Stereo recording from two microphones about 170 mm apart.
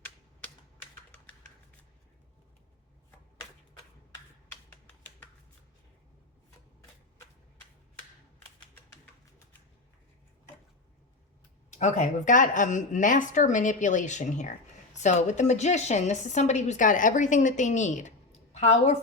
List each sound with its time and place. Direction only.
11.7 s a woman's voice: 45° left (ahead or behind)